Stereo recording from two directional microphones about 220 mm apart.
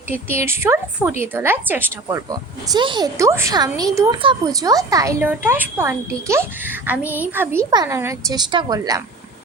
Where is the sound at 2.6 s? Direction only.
20° right (ahead or behind).